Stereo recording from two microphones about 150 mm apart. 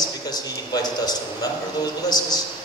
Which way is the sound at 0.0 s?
25° left (ahead or behind).